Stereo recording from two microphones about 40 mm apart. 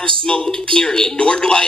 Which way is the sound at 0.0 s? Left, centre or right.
Left.